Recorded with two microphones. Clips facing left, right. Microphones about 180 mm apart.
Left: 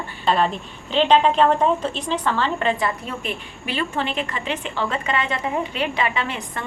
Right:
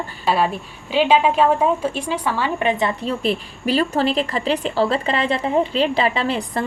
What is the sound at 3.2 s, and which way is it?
A woman's voice, 35° right (ahead or behind).